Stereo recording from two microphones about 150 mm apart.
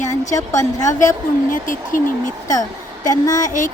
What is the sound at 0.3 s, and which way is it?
Speech, 20° left (ahead or behind).